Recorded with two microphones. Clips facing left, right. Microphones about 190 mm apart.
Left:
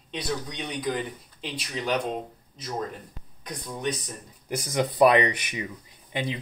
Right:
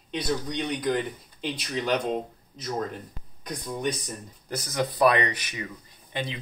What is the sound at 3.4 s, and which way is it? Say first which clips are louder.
Speech: right 2 dB; 5° left (ahead or behind).